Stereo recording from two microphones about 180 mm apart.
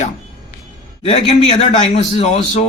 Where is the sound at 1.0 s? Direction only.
35° left (ahead or behind).